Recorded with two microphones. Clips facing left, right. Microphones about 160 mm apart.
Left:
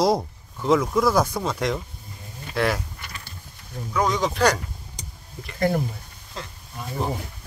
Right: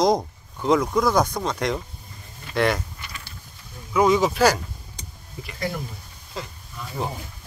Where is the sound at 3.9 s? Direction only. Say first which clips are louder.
Right 5 dB; 5° right (ahead or behind).